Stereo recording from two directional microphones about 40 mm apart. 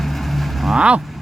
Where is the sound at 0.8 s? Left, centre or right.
Right.